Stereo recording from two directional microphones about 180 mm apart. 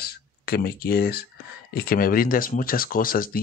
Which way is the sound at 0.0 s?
60° left (ahead or behind).